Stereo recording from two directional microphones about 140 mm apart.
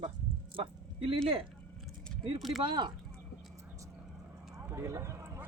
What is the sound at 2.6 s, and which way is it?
Speech, 35° right (ahead or behind).